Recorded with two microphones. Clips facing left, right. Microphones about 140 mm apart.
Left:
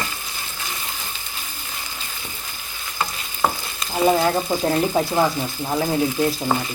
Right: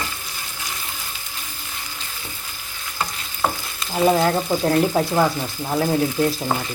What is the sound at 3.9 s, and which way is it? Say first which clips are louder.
Speech: even; centre (ahead or behind).